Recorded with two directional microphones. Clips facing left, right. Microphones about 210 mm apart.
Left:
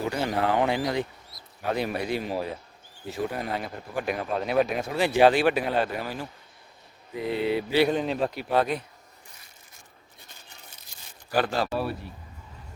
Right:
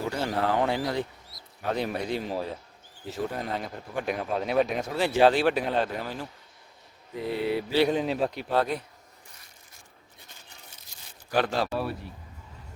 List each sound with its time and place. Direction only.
0.1 s speech: 15° left (ahead or behind)
7.2 s speech: 20° left (ahead or behind)
7.8 s a man's voice: centre (ahead or behind); by 8.8 s 15° left (ahead or behind)
11.4 s a man's voice: centre (ahead or behind)